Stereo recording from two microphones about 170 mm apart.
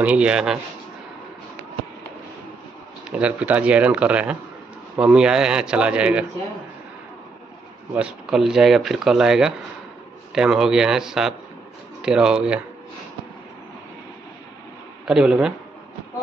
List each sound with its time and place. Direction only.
0.0 s speech: 5° right (ahead or behind)
3.1 s speech: 5° right (ahead or behind)
7.9 s speech: 5° right (ahead or behind)
15.0 s speech: 5° right (ahead or behind)